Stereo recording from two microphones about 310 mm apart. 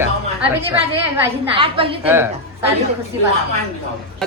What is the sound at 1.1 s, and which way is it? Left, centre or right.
Speech, centre.